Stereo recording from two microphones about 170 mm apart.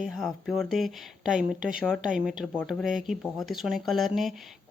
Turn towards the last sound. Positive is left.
turn(degrees=0)  # may be behind; listen again after turning